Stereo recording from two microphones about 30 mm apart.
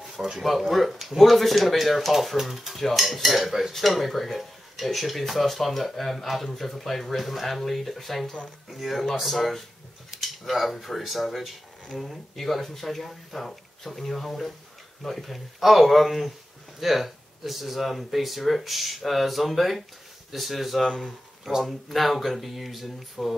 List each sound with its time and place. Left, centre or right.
0.1 s speech: centre
20.8 s speech: centre
21.5 s speech: centre
21.8 s speech: centre